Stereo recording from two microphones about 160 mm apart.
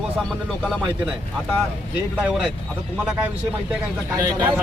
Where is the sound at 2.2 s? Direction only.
5° right (ahead or behind).